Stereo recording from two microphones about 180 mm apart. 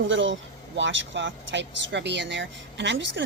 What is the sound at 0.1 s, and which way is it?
Speech, 90° right.